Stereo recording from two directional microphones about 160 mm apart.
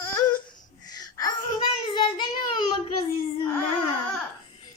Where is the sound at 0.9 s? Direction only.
25° left (ahead or behind).